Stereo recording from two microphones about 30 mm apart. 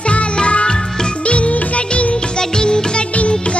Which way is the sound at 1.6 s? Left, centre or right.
Left.